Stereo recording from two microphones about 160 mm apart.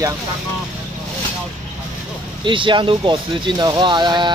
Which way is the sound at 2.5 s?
30° right (ahead or behind).